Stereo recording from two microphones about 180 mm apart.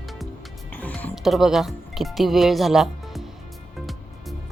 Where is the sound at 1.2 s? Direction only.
Centre (ahead or behind).